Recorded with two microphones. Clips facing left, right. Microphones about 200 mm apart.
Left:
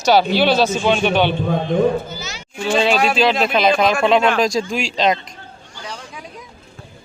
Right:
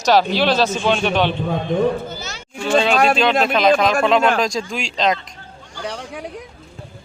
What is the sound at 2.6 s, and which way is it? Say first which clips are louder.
Speech: right 1 dB; 5° left (ahead or behind).